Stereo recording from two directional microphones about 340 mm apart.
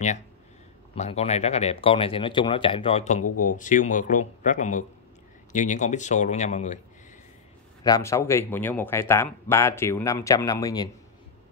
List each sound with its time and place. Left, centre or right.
0.9 s speech: centre
3.3 s speech: left
3.5 s speech: left
7.8 s speech: centre